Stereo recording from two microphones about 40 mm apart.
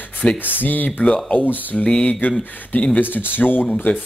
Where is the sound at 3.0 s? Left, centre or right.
Left.